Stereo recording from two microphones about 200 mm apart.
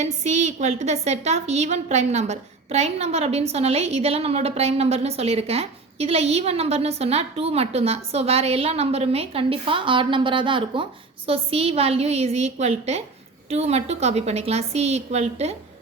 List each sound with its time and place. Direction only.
0.0 s a woman's voice: 35° right (ahead or behind)